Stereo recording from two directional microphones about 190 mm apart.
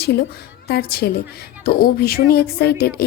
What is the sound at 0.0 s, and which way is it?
A woman's voice, 60° left (ahead or behind).